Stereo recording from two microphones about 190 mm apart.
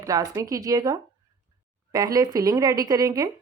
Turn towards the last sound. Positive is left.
turn(degrees=-20)  # may be behind; listen again after turning